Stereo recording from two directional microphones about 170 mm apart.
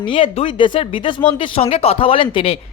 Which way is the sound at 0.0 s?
30° left (ahead or behind).